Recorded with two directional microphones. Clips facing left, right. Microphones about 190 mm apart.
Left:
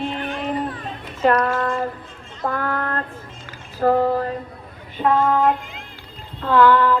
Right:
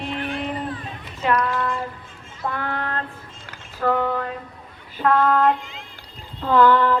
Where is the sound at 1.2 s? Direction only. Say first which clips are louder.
Left 4 dB; 45° left (ahead or behind).